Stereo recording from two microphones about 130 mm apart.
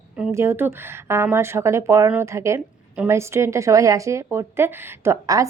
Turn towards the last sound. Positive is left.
turn(degrees=-25)  # may be behind; listen again after turning